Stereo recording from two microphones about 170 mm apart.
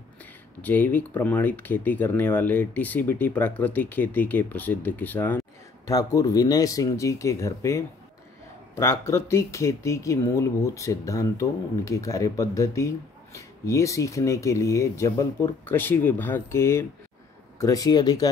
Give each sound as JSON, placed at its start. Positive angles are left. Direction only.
{"t": 0.2, "sound": "speech", "side_deg": 10}